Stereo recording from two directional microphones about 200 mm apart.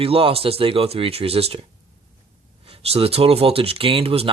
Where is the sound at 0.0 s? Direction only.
30° right (ahead or behind).